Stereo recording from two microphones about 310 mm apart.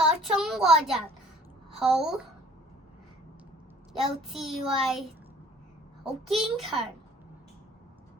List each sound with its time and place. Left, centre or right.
0.0 s a sound: centre
1.8 s child singing: centre
3.9 s child singing: centre
6.2 s child singing: centre